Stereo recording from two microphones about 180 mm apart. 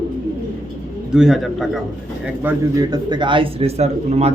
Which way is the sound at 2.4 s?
20° right (ahead or behind).